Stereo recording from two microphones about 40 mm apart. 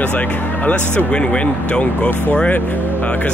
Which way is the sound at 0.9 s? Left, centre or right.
Left.